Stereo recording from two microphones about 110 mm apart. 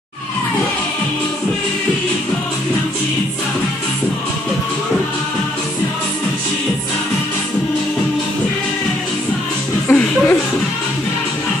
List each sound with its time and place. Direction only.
9.8 s music: 15° left (ahead or behind)